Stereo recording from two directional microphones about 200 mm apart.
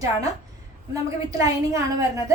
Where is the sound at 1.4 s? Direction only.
15° right (ahead or behind).